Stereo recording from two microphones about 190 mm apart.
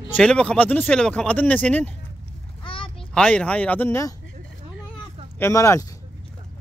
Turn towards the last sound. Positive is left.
turn(degrees=15)  # may be behind; listen again after turning